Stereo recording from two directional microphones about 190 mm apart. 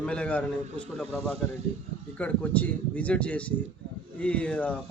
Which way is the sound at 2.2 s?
5° left (ahead or behind).